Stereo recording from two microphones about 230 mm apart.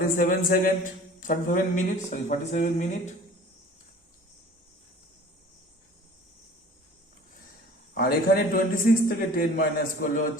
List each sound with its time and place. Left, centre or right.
0.2 s a man's voice: left
7.9 s a man's voice: left